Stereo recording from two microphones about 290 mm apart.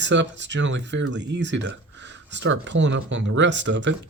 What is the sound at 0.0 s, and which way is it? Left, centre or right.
Speech, right.